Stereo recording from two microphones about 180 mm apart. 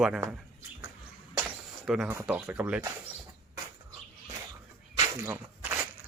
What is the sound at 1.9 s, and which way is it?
Speech, centre (ahead or behind).